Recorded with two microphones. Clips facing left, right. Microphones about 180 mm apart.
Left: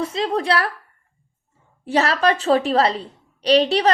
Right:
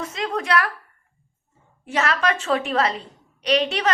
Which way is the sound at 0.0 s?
30° left (ahead or behind).